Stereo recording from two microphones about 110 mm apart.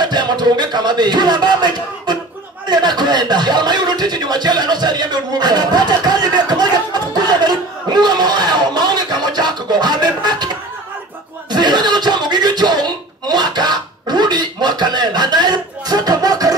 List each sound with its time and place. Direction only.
0.0 s music: 40° right (ahead or behind)
2.7 s a sound: 40° right (ahead or behind)
11.5 s chuckle: 40° right (ahead or behind)